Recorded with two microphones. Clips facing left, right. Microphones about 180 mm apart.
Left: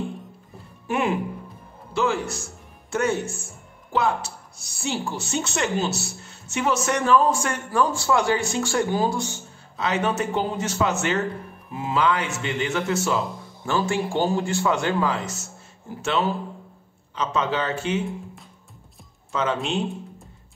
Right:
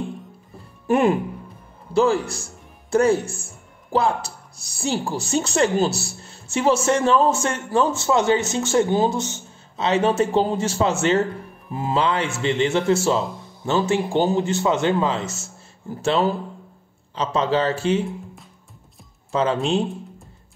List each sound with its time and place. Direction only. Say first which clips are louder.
0.8 s a man's voice: right 6 dB; 40° right (ahead or behind)
19.3 s a man's voice: right 4 dB; 35° right (ahead or behind)